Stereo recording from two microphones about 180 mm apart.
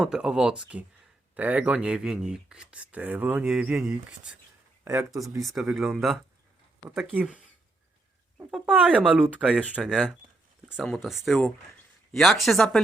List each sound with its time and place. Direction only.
0.0 s speech: 5° right (ahead or behind)
4.9 s speech: 15° right (ahead or behind)
5.4 s speech: centre (ahead or behind)